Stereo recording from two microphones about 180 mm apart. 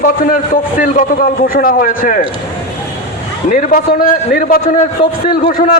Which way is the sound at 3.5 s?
50° left (ahead or behind).